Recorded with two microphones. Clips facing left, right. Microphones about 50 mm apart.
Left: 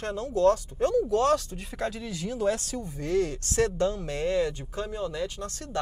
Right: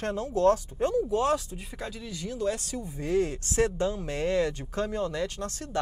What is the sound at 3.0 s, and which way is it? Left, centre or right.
Speech, right.